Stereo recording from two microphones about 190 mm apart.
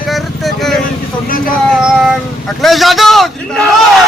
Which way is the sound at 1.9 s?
Centre (ahead or behind).